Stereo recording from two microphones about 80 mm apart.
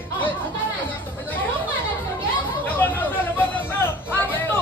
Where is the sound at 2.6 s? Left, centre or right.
Left.